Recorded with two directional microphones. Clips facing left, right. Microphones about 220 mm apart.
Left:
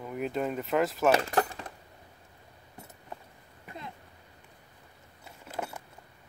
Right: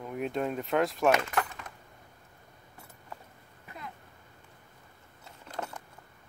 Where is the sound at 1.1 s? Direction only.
35° left (ahead or behind).